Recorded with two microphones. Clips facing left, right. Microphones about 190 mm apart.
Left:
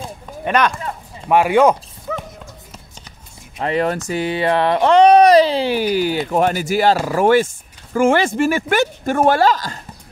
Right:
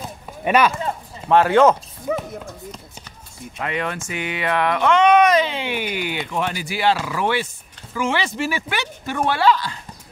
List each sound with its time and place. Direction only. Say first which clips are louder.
0.5 s speech: even; 5° right (ahead or behind)
1.3 s speech: left 1 dB; 10° left (ahead or behind)
2.1 s speech: right 3 dB; 15° right (ahead or behind)
3.5 s speech: left 7 dB; 35° left (ahead or behind)